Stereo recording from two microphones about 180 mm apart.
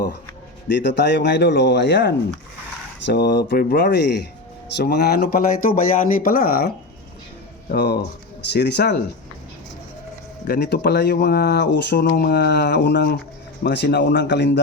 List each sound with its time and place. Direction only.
0.8 s speech: 75° left (ahead or behind)
10.4 s speech: 60° left (ahead or behind); by 14.6 s 75° left (ahead or behind)